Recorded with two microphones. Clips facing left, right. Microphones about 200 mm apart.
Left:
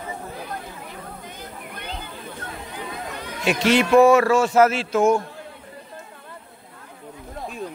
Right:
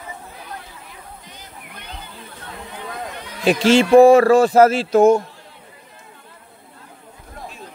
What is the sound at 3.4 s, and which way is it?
Speech, 30° right (ahead or behind).